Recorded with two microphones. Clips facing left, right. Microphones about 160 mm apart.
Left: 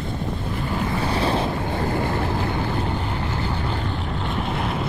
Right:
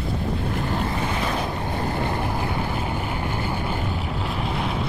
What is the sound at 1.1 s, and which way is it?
Waves, 30° left (ahead or behind).